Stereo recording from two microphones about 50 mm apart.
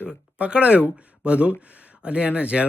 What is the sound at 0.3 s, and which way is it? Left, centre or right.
A man's voice, right.